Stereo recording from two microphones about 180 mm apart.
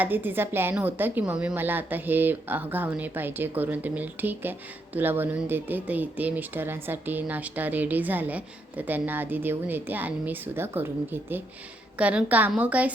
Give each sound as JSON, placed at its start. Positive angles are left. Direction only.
{"t": 0.0, "sound": "speech", "side_deg": -10}